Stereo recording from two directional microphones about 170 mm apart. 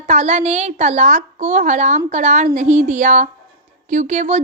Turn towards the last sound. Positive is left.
turn(degrees=-45)  # may be behind; listen again after turning